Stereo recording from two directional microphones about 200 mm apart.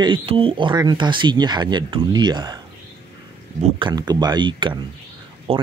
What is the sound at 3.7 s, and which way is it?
Speech, 20° right (ahead or behind).